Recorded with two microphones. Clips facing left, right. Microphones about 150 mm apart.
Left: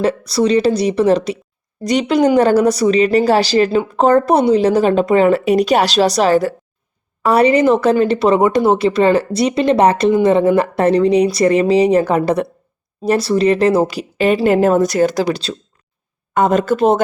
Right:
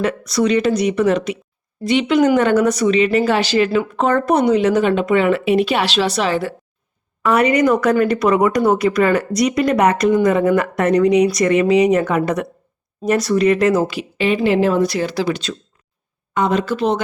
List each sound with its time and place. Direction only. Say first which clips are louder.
0.0 s speech: left 2 dB; 30° left (ahead or behind)
16.3 s speech: left 4 dB; 45° left (ahead or behind)